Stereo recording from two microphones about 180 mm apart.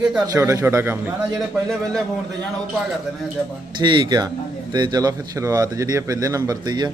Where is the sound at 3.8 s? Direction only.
25° right (ahead or behind).